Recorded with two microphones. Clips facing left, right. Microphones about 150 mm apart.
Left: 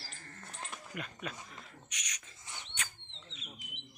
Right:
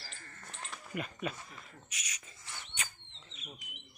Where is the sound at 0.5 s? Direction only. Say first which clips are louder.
Right 1 dB; centre (ahead or behind).